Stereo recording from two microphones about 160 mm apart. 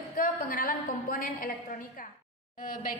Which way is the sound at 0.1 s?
60° left (ahead or behind).